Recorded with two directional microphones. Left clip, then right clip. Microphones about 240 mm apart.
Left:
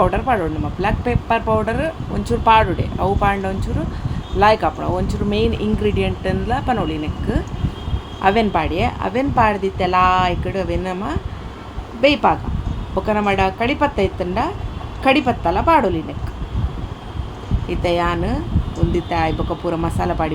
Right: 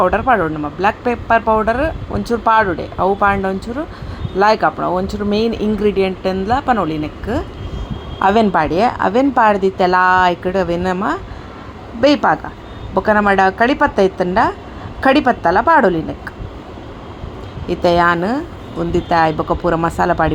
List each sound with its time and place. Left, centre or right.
0.0 s speech: centre
8.2 s a woman's voice: right
17.7 s a woman's voice: centre